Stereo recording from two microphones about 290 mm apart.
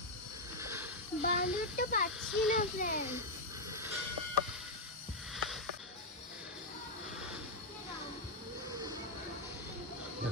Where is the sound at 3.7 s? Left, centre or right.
Centre.